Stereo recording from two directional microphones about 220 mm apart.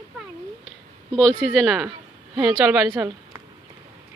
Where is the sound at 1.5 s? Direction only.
Centre (ahead or behind).